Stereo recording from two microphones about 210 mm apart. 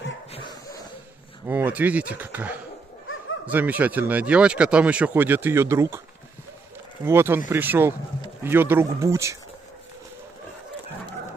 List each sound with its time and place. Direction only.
1.5 s speech: 10° right (ahead or behind)
3.1 s bow-wow: 75° left (ahead or behind)
3.4 s speech: 10° right (ahead or behind)
7.1 s speech: 10° right (ahead or behind)